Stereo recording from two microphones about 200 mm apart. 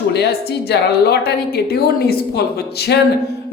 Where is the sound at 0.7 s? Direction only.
55° left (ahead or behind).